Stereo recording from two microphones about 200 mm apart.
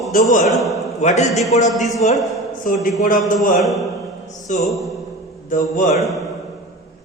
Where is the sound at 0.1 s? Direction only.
40° left (ahead or behind).